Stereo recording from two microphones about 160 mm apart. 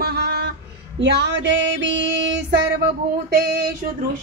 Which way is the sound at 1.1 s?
90° right.